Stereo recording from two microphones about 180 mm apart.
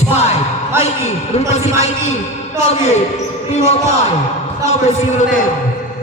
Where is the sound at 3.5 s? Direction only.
35° left (ahead or behind).